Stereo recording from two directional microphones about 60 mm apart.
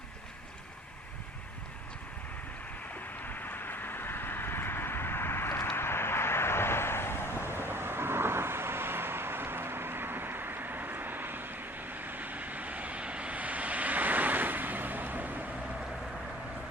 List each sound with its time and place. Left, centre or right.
3.2 s vehicle: left
7.5 s vehicle: right